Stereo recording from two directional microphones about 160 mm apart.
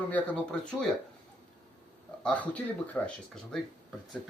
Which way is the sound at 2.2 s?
10° left (ahead or behind).